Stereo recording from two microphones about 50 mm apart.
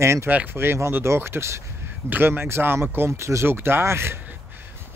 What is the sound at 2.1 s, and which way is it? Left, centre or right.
Speech, right.